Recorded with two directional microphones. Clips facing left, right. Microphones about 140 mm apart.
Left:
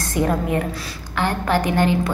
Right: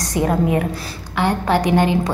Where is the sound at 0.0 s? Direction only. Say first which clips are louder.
Right 3 dB; 15° right (ahead or behind).